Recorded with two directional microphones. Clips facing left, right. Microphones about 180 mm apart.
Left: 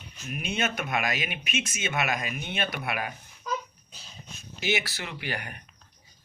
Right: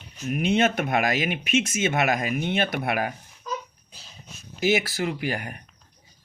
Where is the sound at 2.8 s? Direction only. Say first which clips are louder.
Right 6 dB; 40° right (ahead or behind).